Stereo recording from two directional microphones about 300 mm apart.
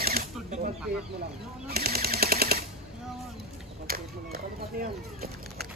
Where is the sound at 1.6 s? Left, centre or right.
Right.